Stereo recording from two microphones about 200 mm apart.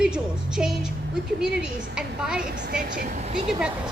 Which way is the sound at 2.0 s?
5° right (ahead or behind).